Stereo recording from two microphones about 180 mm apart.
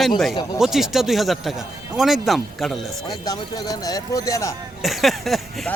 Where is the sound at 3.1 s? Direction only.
20° left (ahead or behind).